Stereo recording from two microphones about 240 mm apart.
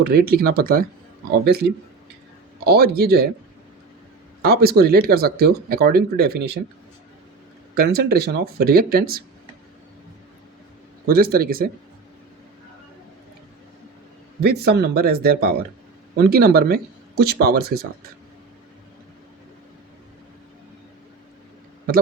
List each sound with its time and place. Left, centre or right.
0.0 s speech: right
4.4 s speech: right
7.8 s speech: right
11.0 s speech: right
14.4 s speech: right